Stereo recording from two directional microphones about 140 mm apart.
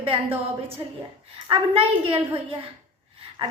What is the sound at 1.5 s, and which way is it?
A woman's voice, 40° right (ahead or behind).